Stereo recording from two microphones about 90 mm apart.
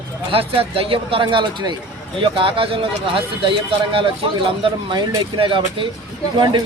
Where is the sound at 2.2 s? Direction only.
75° right (ahead or behind).